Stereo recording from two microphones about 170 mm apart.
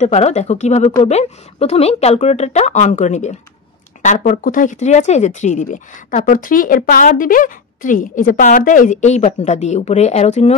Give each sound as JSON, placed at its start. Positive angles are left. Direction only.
{"t": 0.0, "sound": "speech", "side_deg": 40}